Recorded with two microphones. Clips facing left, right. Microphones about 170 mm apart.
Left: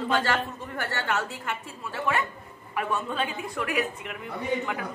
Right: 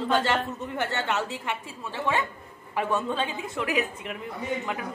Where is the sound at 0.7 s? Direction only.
20° right (ahead or behind).